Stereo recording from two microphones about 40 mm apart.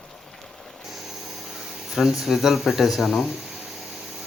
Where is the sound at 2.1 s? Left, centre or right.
Centre.